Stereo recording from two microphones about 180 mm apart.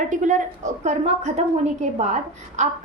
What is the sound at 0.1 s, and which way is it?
A woman's voice, 45° right (ahead or behind).